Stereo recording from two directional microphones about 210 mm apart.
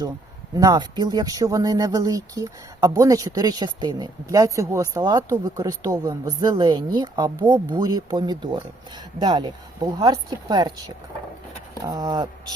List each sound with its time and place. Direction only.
0.5 s speech: 20° right (ahead or behind)